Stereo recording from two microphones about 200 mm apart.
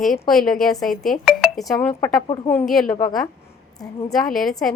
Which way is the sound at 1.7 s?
15° left (ahead or behind).